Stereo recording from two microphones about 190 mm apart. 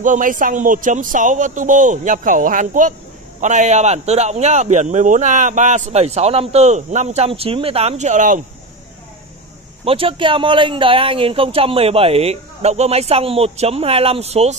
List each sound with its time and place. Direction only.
0.0 s a man's voice: 45° right (ahead or behind)
9.8 s a man's voice: 30° right (ahead or behind)